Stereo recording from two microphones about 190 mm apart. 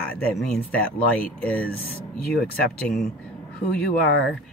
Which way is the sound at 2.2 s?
55° left (ahead or behind).